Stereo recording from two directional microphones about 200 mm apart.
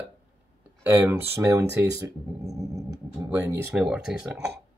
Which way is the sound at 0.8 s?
10° right (ahead or behind).